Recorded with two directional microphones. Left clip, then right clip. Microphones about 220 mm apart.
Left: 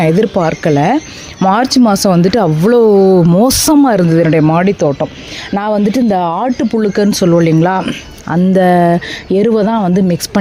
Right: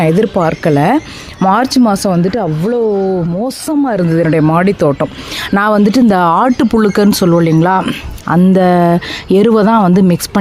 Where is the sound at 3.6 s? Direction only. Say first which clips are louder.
Left 5 dB; 25° left (ahead or behind); by 4.7 s centre (ahead or behind).